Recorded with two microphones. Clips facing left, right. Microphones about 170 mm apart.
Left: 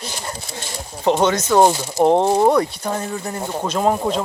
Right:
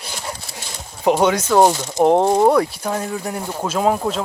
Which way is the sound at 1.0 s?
10° right (ahead or behind).